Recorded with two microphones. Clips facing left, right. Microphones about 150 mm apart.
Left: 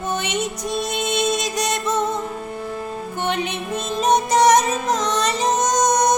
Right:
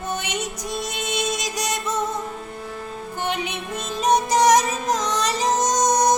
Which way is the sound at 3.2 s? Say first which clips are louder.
Left 3 dB; 10° right (ahead or behind).